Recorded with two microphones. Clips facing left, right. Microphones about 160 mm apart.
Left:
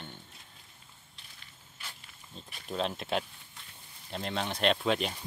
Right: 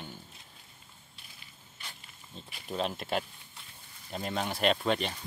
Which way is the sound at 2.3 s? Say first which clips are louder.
Even; 5° right (ahead or behind).